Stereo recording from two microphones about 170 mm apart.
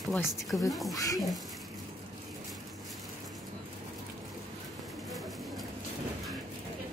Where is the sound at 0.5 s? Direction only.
15° left (ahead or behind).